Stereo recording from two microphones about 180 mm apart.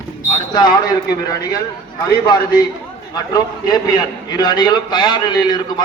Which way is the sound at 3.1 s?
20° left (ahead or behind).